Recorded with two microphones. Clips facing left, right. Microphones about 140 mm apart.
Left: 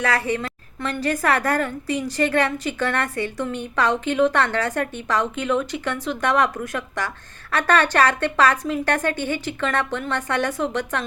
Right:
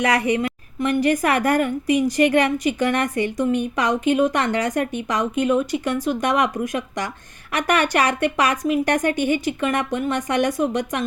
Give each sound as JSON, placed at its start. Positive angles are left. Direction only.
{"t": 0.0, "sound": "a woman's voice", "side_deg": -15}